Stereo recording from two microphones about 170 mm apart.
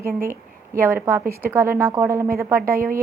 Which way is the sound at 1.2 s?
60° right (ahead or behind).